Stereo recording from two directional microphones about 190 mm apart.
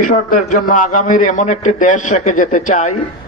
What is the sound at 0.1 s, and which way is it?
A man's voice, 45° left (ahead or behind).